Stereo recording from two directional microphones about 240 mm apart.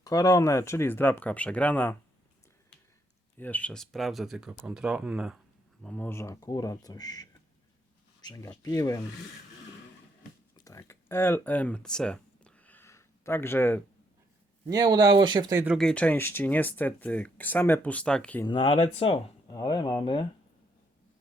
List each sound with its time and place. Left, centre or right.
0.0 s speech: centre
3.3 s speech: centre
10.6 s a sound: centre
14.7 s speech: centre
18.4 s speech: left